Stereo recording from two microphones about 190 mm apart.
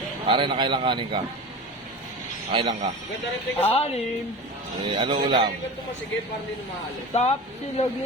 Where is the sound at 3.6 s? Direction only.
30° left (ahead or behind).